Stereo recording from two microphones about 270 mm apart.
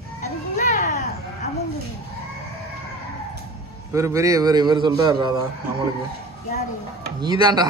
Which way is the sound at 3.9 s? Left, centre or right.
Centre.